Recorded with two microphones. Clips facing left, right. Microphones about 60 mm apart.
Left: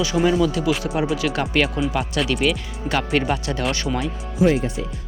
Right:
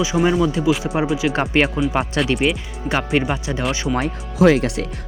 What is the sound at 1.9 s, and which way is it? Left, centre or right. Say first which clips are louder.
Speech: right 5 dB; right.